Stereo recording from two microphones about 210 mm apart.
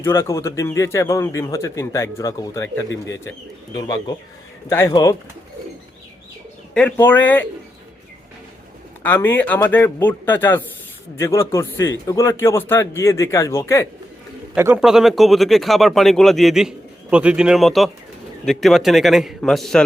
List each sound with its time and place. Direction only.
0.0 s a man's voice: 10° left (ahead or behind)
6.7 s a man's voice: 5° left (ahead or behind)
9.0 s a man's voice: 10° left (ahead or behind)
14.5 s speech: 10° right (ahead or behind)